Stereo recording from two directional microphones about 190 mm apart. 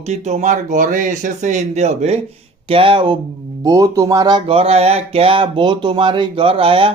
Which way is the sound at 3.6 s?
20° right (ahead or behind).